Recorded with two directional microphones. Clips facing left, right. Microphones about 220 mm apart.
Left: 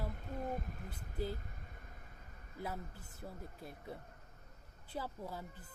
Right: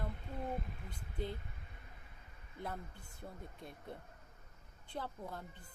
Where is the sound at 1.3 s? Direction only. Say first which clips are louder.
Left 2 dB; 45° left (ahead or behind).